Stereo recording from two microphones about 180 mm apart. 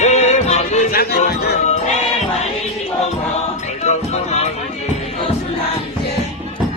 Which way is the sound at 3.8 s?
40° left (ahead or behind).